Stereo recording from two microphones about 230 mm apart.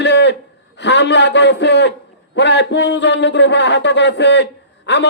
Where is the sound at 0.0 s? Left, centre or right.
Left.